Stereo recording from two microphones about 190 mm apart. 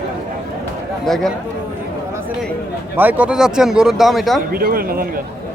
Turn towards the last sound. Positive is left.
turn(degrees=-50)  # may be behind; listen again after turning